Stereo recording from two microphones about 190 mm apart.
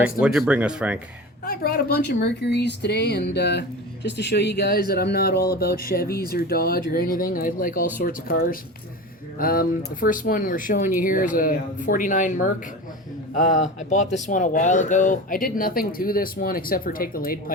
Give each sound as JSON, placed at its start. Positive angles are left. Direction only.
{"t": 0.0, "sound": "speech", "side_deg": -5}
{"t": 1.5, "sound": "speech", "side_deg": 55}